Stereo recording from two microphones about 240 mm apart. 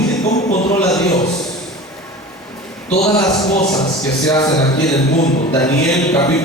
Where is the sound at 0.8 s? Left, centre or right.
Centre.